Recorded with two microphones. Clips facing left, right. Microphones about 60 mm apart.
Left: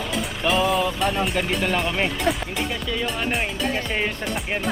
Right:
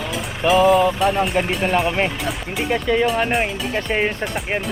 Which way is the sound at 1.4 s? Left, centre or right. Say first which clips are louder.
Right 5 dB; right.